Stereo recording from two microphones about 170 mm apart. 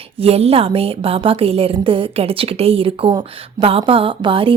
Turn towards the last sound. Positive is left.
turn(degrees=-30)  # may be behind; listen again after turning